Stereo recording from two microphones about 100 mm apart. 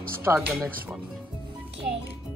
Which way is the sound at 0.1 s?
25° right (ahead or behind).